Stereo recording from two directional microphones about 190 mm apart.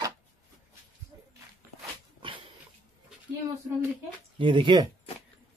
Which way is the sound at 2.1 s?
25° right (ahead or behind).